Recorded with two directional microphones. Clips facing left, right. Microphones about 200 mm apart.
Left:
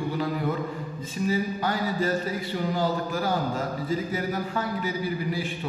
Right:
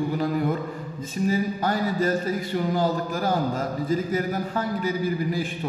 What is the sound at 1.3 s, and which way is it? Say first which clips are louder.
Speech: right 2 dB; 45° right (ahead or behind).